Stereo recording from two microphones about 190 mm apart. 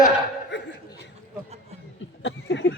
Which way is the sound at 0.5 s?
65° left (ahead or behind).